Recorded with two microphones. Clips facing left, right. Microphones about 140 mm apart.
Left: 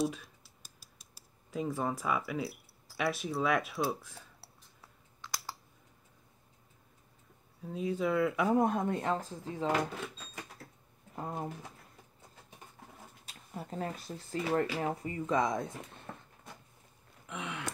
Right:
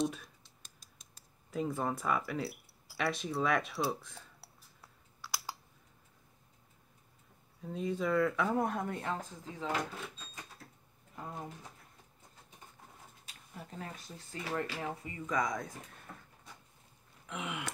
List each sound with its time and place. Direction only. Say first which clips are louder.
0.0 s a sound: left 1 dB; 5° left (ahead or behind)
7.6 s speech: left 2 dB; 5° left (ahead or behind); by 9.4 s 25° left (ahead or behind)
11.1 s speech: left 5 dB; 40° left (ahead or behind)
13.2 s speech: left 6 dB; 35° left (ahead or behind)
16.1 s a sound: left 5 dB; 60° left (ahead or behind)
17.3 s gasp: even; 5° right (ahead or behind)